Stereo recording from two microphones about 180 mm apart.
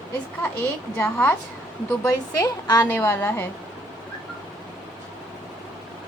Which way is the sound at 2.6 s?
15° left (ahead or behind).